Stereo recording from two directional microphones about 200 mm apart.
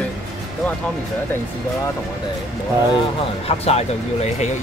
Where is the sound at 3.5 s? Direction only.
30° left (ahead or behind).